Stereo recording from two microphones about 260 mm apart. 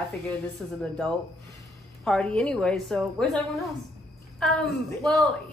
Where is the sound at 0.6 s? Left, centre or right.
Centre.